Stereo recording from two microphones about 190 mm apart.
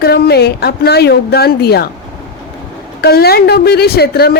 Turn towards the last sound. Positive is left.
turn(degrees=55)  # may be behind; listen again after turning